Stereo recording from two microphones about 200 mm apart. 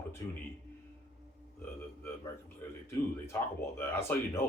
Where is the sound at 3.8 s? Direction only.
10° left (ahead or behind).